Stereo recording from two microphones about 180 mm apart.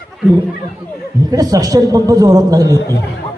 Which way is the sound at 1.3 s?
20° right (ahead or behind).